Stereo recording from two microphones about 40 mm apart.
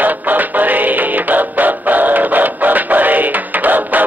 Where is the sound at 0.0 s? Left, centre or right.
Right.